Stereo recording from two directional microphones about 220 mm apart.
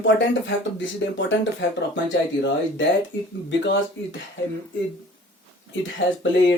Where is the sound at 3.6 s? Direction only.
55° left (ahead or behind).